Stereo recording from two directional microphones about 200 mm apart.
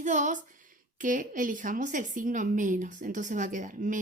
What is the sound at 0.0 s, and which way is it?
Speech, 40° right (ahead or behind).